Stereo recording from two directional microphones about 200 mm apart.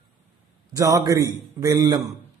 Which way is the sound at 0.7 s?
15° right (ahead or behind).